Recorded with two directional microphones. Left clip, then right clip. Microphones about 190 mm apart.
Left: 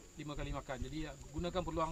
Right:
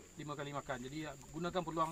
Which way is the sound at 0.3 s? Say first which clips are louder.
Right 2 dB; 15° left (ahead or behind).